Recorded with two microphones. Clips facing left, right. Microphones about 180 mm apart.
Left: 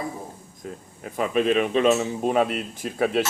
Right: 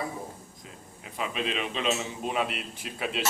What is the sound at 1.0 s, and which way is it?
A man's voice, 50° left (ahead or behind).